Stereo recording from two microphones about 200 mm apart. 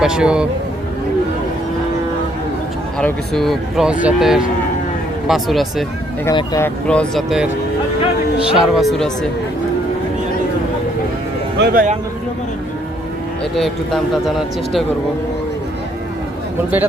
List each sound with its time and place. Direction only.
0.0 s a man's voice: 5° right (ahead or behind)
3.0 s a man's voice: centre (ahead or behind)
6.2 s speech: 15° left (ahead or behind)
6.8 s a man's voice: 5° left (ahead or behind)
8.5 s a man's voice: centre (ahead or behind)
11.5 s speech: 50° right (ahead or behind)
13.6 s a man's voice: centre (ahead or behind)